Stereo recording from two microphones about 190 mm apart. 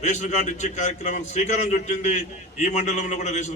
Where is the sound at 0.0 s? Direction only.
40° left (ahead or behind).